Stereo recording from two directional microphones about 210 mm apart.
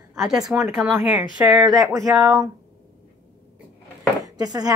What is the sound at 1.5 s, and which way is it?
A woman's voice, 15° right (ahead or behind).